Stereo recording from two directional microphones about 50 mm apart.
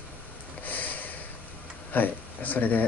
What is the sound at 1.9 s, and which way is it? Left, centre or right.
Speech, left.